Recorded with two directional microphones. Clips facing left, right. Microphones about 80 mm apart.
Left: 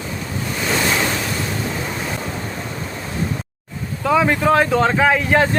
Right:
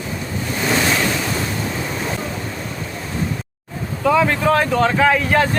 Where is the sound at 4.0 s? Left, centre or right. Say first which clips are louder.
Even; centre.